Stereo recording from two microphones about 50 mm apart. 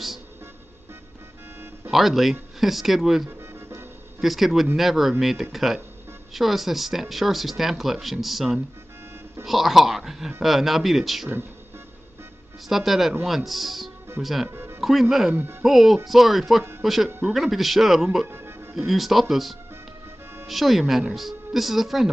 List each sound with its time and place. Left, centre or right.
1.9 s speech: centre
3.3 s music: right
4.2 s speech: centre
12.6 s speech: centre
14.5 s music: right
14.8 s speech: centre
18.3 s music: right
18.8 s speech: centre